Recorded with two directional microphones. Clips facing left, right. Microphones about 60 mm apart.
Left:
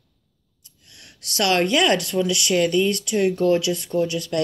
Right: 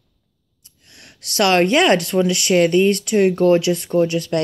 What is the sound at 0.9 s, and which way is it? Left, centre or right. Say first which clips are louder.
Speech: right 5 dB; right.